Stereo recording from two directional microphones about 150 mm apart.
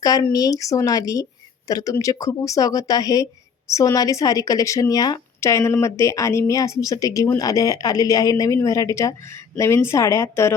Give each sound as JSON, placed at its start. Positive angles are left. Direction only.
{"t": 0.0, "sound": "speech", "side_deg": 25}